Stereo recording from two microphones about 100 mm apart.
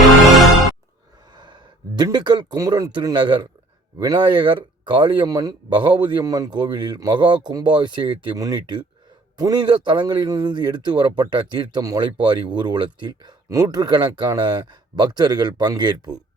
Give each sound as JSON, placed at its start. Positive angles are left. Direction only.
{"t": 1.3, "sound": "a sound", "side_deg": -45}
{"t": 2.1, "sound": "speech", "side_deg": -45}
{"t": 2.6, "sound": "speech", "side_deg": -35}
{"t": 5.3, "sound": "speech", "side_deg": -40}
{"t": 5.7, "sound": "speech", "side_deg": -50}
{"t": 6.2, "sound": "speech", "side_deg": -35}
{"t": 11.8, "sound": "speech", "side_deg": -35}
{"t": 12.0, "sound": "speech", "side_deg": -50}
{"t": 13.5, "sound": "speech", "side_deg": -35}